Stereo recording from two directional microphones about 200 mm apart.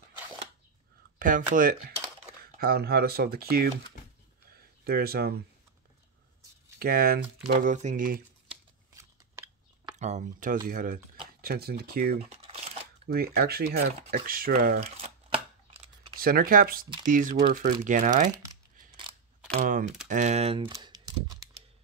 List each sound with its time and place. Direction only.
1.2 s speech: 40° right (ahead or behind)
6.8 s speech: 50° right (ahead or behind)
7.7 s speech: 40° right (ahead or behind)
8.9 s shuffling cards: 15° right (ahead or behind)
9.9 s speech: 35° right (ahead or behind)
14.8 s a sound: 30° right (ahead or behind)
16.2 s speech: 45° right (ahead or behind)
19.6 s speech: 40° right (ahead or behind)
20.1 s typing: 35° right (ahead or behind); by 21.5 s 20° right (ahead or behind)